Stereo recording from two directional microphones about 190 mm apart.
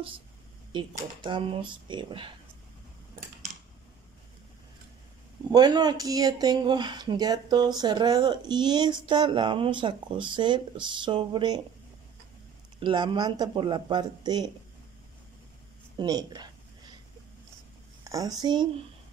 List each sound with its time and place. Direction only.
0.7 s speech: 25° right (ahead or behind)
5.5 s speech: 20° right (ahead or behind)
12.8 s speech: 25° right (ahead or behind)
16.0 s speech: 20° right (ahead or behind)
18.0 s speech: 20° right (ahead or behind)